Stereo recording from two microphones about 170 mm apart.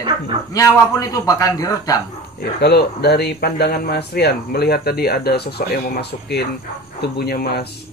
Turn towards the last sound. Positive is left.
turn(degrees=65)  # may be behind; listen again after turning